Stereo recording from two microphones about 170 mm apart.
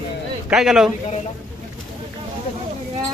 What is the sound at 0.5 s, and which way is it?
Speech, centre (ahead or behind).